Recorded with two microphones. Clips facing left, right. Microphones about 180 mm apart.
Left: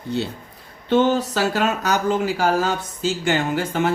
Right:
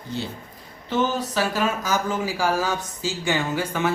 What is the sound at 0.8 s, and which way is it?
Speech, 70° left (ahead or behind).